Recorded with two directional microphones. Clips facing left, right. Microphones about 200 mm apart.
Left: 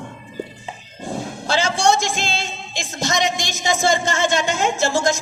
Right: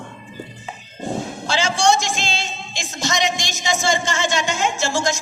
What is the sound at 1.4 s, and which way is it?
Speech, 55° left (ahead or behind).